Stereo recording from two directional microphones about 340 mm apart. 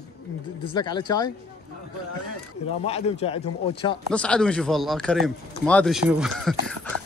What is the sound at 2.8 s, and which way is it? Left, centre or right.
Speech, centre.